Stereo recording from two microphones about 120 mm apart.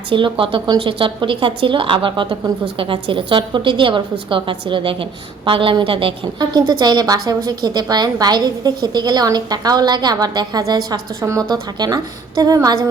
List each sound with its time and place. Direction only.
0.1 s a woman's voice: 45° right (ahead or behind)
6.4 s a woman's voice: 35° right (ahead or behind)